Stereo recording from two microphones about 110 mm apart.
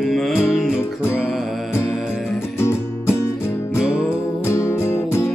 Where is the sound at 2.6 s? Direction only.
25° left (ahead or behind).